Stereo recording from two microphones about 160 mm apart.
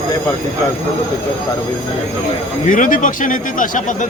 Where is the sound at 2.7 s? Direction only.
55° left (ahead or behind).